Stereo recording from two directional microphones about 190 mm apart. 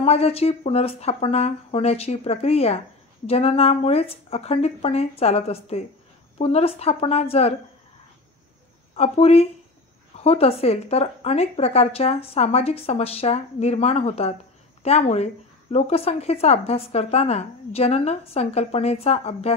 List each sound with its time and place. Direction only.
0.0 s a woman's voice: 30° left (ahead or behind)
8.9 s a woman's voice: 35° left (ahead or behind)